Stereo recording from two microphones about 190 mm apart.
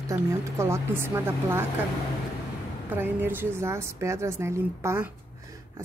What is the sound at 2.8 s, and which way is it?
A woman's voice, 10° right (ahead or behind).